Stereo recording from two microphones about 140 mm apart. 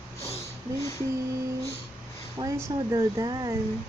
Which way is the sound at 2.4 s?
25° right (ahead or behind).